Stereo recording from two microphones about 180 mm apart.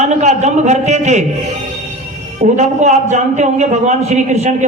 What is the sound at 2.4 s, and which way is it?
A man's voice, 40° right (ahead or behind).